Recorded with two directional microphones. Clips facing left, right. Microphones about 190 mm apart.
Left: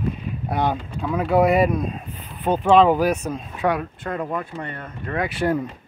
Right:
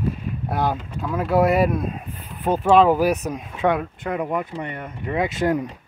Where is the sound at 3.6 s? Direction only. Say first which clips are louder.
Right 2 dB; 20° right (ahead or behind).